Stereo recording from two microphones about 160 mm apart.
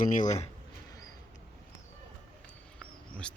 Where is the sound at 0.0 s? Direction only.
55° left (ahead or behind).